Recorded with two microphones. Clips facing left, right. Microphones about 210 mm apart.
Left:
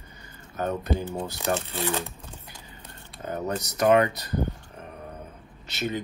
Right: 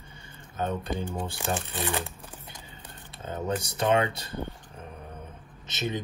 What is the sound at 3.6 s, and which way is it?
Speech, 25° right (ahead or behind).